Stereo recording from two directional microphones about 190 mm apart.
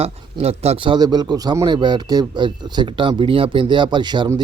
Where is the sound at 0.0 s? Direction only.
35° right (ahead or behind).